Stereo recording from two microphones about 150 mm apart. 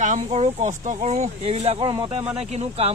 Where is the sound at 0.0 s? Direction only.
55° right (ahead or behind).